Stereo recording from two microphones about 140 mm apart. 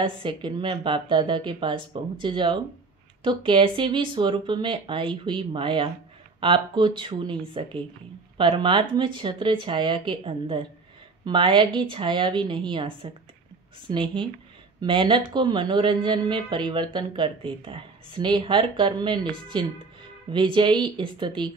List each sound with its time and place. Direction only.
0.0 s speech: 35° right (ahead or behind)